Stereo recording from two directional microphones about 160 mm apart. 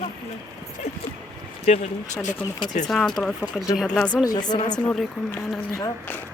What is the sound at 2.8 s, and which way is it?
Speech, centre (ahead or behind).